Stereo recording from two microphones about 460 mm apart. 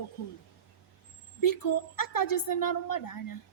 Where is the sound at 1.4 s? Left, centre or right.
Left.